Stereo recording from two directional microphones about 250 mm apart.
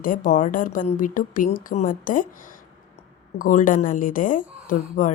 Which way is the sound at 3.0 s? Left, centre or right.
Left.